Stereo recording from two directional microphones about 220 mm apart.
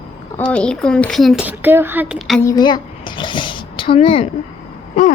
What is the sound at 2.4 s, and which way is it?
Speech, 15° left (ahead or behind).